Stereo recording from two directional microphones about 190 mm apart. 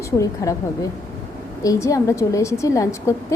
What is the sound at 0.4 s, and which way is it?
Speech, 15° left (ahead or behind).